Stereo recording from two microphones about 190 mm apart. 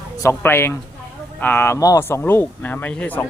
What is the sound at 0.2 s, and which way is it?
Speech, 15° left (ahead or behind).